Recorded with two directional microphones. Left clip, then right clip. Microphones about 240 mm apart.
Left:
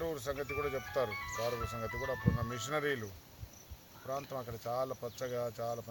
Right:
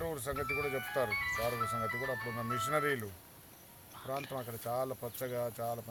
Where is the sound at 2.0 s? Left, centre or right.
Centre.